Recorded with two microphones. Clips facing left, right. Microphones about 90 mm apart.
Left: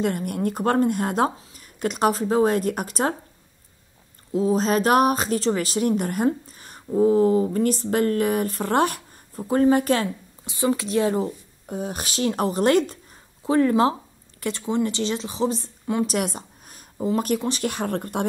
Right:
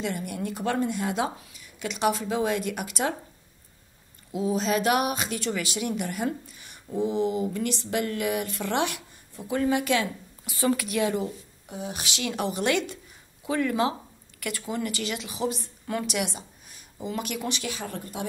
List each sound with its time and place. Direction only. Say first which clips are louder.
0.0 s speech: left 7 dB; 50° left (ahead or behind)
4.3 s speech: left 5 dB; 40° left (ahead or behind)
10.4 s a woman's voice: left 2 dB; 20° left (ahead or behind)
16.1 s a woman's voice: left 4 dB; 45° left (ahead or behind)